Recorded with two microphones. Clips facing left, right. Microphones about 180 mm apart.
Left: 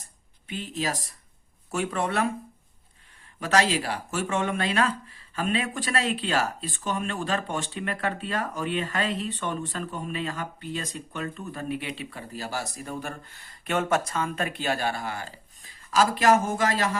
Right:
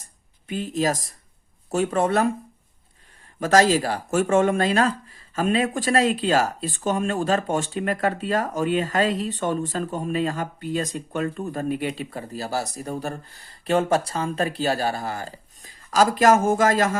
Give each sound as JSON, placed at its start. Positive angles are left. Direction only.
{"t": 0.0, "sound": "a sound", "side_deg": -45}
{"t": 1.7, "sound": "speech", "side_deg": -40}
{"t": 3.4, "sound": "speech", "side_deg": -40}